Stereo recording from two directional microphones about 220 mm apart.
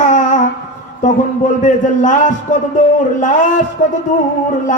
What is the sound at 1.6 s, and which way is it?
A man's voice, 35° left (ahead or behind).